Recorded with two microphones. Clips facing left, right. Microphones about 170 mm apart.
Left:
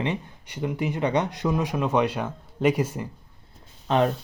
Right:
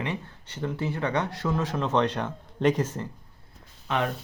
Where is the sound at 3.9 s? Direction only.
30° left (ahead or behind).